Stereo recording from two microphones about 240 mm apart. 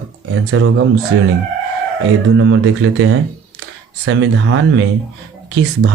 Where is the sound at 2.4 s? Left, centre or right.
Right.